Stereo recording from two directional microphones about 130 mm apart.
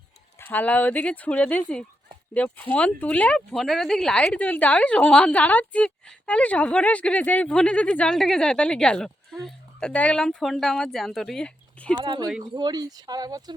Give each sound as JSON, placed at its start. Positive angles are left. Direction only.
{"t": 0.3, "sound": "speech", "side_deg": 15}
{"t": 12.0, "sound": "speech", "side_deg": -35}